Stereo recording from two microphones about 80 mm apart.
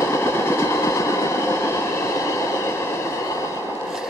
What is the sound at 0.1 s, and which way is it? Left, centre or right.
Train, left.